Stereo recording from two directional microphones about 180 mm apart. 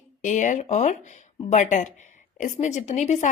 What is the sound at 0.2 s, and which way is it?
A woman's voice, 45° left (ahead or behind).